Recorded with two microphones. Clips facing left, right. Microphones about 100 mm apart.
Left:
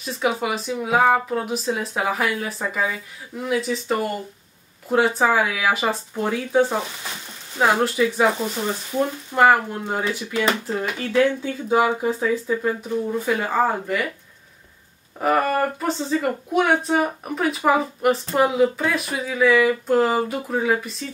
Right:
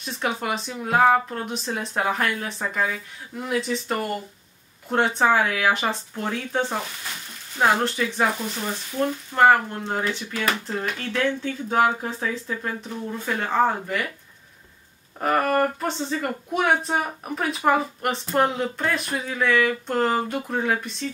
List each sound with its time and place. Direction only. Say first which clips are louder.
0.0 s speech: left 4 dB; centre (ahead or behind)
15.1 s speech: left 1 dB; centre (ahead or behind)